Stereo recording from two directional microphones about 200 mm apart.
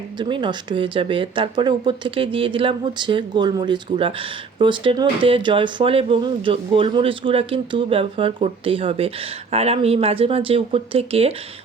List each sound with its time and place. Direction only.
0.2 s speech: 25° right (ahead or behind)